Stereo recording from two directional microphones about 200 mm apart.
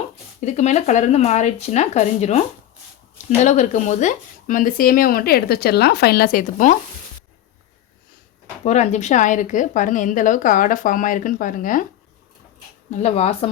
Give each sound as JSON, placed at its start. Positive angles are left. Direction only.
{"t": 0.4, "sound": "a woman's voice", "side_deg": 35}
{"t": 8.6, "sound": "a woman's voice", "side_deg": 35}
{"t": 12.9, "sound": "a woman's voice", "side_deg": 35}